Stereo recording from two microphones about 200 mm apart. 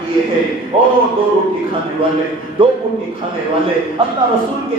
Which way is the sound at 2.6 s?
25° right (ahead or behind).